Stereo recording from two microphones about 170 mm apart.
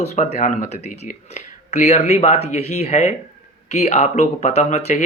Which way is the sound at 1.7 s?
40° left (ahead or behind).